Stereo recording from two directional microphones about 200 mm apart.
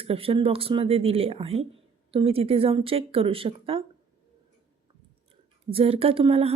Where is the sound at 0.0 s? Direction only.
30° right (ahead or behind).